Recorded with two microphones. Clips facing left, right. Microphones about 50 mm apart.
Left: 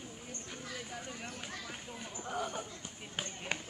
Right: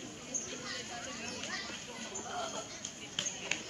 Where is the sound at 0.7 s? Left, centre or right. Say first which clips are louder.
Left 2 dB; centre.